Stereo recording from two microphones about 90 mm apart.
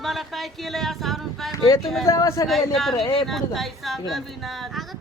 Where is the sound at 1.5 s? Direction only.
40° left (ahead or behind).